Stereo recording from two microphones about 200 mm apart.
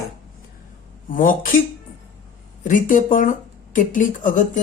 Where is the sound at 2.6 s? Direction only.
40° left (ahead or behind).